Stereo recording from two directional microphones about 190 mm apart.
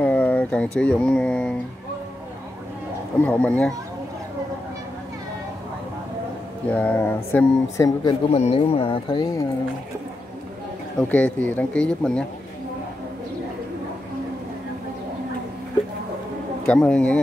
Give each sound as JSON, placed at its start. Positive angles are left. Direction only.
{"t": 0.0, "sound": "mantra", "side_deg": 10}
{"t": 3.3, "sound": "speech", "side_deg": 5}
{"t": 6.7, "sound": "speech", "side_deg": 10}
{"t": 8.3, "sound": "speech", "side_deg": 35}
{"t": 11.0, "sound": "speech", "side_deg": 5}
{"t": 16.6, "sound": "speech", "side_deg": 5}